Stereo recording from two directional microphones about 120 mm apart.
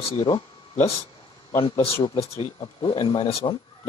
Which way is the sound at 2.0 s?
55° left (ahead or behind).